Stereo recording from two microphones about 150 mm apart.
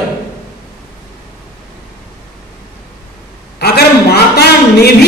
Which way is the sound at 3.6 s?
90° left.